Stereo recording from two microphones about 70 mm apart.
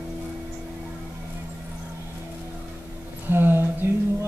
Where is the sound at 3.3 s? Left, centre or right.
Right.